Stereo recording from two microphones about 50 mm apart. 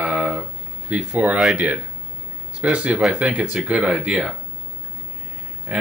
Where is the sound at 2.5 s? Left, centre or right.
Right.